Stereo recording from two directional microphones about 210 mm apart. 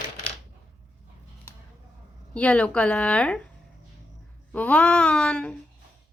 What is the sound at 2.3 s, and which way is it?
A woman's voice, 5° left (ahead or behind).